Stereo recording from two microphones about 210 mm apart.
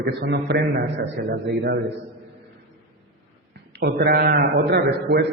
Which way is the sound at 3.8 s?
50° right (ahead or behind).